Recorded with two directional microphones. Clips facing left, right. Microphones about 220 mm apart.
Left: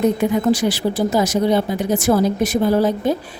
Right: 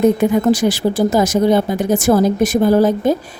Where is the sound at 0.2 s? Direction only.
45° right (ahead or behind).